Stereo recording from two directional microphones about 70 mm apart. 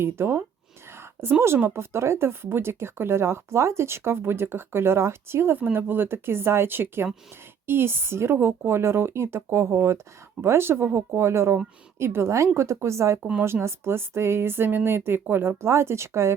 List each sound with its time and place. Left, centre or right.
0.0 s a woman's voice: right